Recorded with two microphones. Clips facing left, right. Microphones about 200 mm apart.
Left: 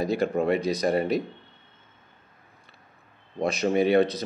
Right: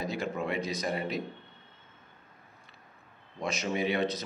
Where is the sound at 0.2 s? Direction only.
55° left (ahead or behind).